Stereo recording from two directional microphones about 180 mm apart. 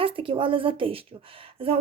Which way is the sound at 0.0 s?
30° right (ahead or behind).